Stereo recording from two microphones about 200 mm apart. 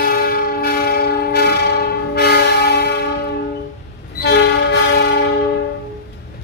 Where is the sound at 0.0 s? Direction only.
45° left (ahead or behind).